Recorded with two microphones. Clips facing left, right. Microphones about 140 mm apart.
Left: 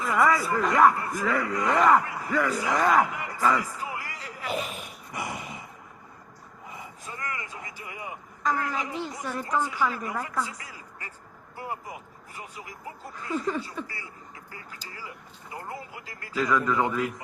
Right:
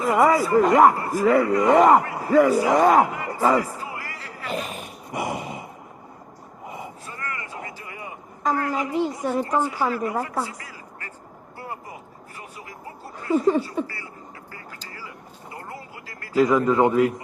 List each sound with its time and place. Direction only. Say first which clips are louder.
0.0 s a man's voice: right 5 dB; 25° right (ahead or behind)
3.8 s a sound: right 1 dB; 15° left (ahead or behind)
4.5 s speech: right 3 dB; centre (ahead or behind)
5.1 s a sound: right 7 dB; 25° right (ahead or behind)
6.7 s a sound: right 7 dB; 25° right (ahead or behind)
7.0 s vehicle: right 2 dB; 15° left (ahead or behind)
8.7 s a man's voice: right 8 dB; 30° right (ahead or behind)
10.6 s quack: right 3 dB; 15° left (ahead or behind)
11.5 s vehicle: even; 15° left (ahead or behind)
13.2 s a man's voice: right 10 dB; 20° right (ahead or behind)
13.8 s speech: right 4 dB; 15° left (ahead or behind)
14.5 s vehicle: even; 15° left (ahead or behind)
15.5 s a sound: left 1 dB; 15° left (ahead or behind)
16.3 s a man's voice: right 7 dB; 25° right (ahead or behind)